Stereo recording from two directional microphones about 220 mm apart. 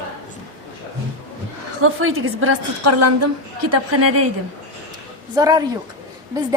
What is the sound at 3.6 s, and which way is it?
Speech, 90° right.